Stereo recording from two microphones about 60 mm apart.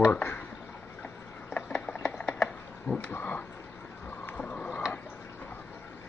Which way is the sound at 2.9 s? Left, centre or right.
Left.